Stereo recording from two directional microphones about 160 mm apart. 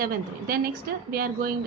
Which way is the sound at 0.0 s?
65° right (ahead or behind).